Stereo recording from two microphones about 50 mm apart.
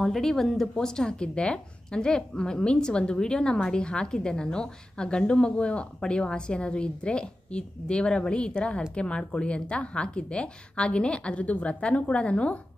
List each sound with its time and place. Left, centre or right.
0.0 s a woman's voice: centre; by 12.5 s left